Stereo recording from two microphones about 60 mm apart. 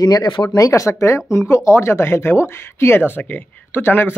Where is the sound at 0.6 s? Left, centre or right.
Left.